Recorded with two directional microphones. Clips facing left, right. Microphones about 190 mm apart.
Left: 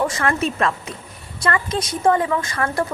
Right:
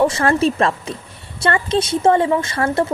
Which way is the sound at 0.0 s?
30° right (ahead or behind).